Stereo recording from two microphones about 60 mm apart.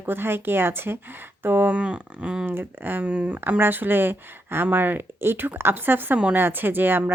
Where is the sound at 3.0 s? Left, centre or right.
Centre.